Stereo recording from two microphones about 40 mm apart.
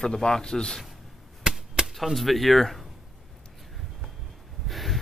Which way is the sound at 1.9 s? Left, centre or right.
Centre.